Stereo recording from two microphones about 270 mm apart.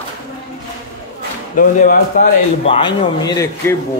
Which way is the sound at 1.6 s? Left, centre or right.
Left.